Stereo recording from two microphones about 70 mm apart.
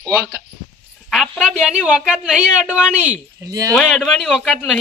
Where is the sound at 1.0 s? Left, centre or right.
Centre.